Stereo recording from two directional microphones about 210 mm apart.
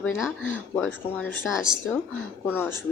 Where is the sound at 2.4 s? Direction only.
10° left (ahead or behind).